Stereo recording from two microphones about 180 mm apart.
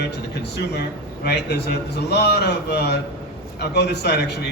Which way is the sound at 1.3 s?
65° left (ahead or behind).